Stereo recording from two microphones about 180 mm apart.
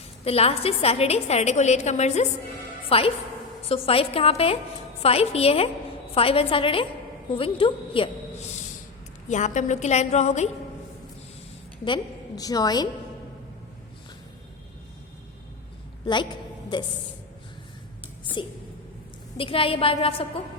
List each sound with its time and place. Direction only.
0.3 s a woman's voice: 35° left (ahead or behind)
9.3 s a woman's voice: 40° left (ahead or behind)
12.4 s a woman's voice: 20° left (ahead or behind)
16.7 s a woman's voice: 25° left (ahead or behind)
19.4 s a woman's voice: 30° left (ahead or behind)